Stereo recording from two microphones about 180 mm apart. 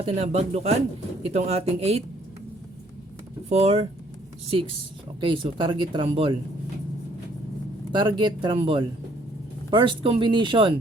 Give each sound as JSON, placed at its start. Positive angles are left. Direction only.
{"t": 0.0, "sound": "speech", "side_deg": -35}
{"t": 3.5, "sound": "speech", "side_deg": -35}
{"t": 5.2, "sound": "speech", "side_deg": -30}
{"t": 7.9, "sound": "speech", "side_deg": -25}